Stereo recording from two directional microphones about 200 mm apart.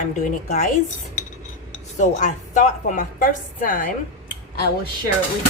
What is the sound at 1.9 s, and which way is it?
A woman's voice, 35° left (ahead or behind).